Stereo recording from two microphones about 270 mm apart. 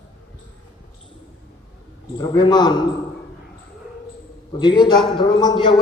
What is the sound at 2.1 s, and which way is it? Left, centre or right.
Speech, centre.